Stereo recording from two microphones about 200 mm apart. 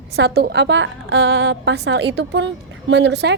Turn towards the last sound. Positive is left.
turn(degrees=-60)  # may be behind; listen again after turning